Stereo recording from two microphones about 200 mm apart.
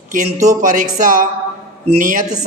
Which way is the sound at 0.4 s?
40° right (ahead or behind).